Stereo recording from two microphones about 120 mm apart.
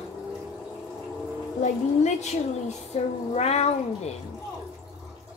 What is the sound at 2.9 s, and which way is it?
Cat, 60° left (ahead or behind).